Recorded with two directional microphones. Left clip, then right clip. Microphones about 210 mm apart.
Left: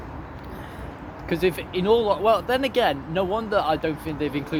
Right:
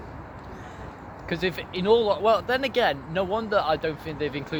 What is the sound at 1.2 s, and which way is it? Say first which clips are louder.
Speech: left 4 dB; 25° right (ahead or behind).